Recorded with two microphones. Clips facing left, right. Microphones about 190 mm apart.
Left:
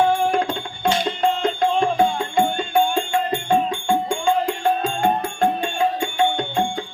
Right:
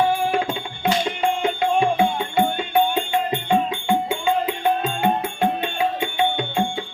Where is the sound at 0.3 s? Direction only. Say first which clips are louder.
Left 1 dB; 5° right (ahead or behind).